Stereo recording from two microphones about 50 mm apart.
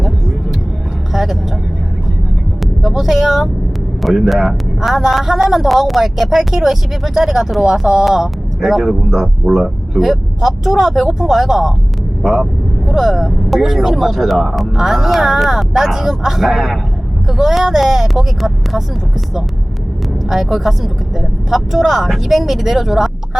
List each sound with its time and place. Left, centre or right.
1.1 s vehicle: centre
2.8 s a woman's voice: centre
20.3 s a woman's voice: centre